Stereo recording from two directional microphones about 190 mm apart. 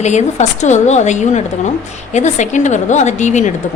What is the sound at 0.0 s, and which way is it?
A woman's voice, 35° left (ahead or behind).